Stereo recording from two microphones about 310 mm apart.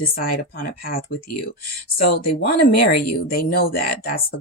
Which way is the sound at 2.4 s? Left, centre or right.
Left.